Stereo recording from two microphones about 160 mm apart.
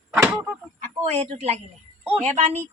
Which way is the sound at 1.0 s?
45° right (ahead or behind).